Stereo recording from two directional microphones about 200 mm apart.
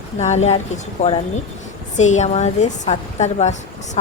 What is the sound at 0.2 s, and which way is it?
A woman's voice, 35° left (ahead or behind).